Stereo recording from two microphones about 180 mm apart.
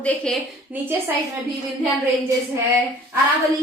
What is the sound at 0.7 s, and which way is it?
Speech, 10° right (ahead or behind).